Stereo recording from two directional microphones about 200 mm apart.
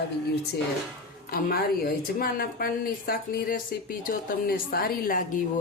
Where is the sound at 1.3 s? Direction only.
50° left (ahead or behind).